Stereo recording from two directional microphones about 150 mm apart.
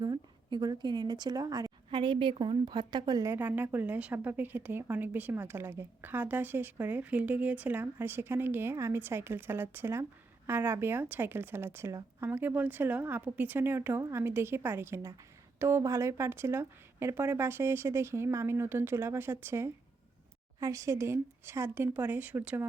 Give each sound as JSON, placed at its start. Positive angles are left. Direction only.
{"t": 0.0, "sound": "a woman's voice", "side_deg": -30}
{"t": 3.3, "sound": "a woman's voice", "side_deg": -15}